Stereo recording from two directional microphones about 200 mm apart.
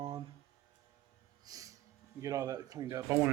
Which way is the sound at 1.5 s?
15° right (ahead or behind).